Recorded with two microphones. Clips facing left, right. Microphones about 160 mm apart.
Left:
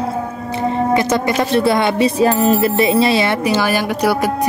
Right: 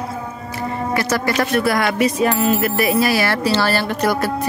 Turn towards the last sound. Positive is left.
turn(degrees=10)  # may be behind; listen again after turning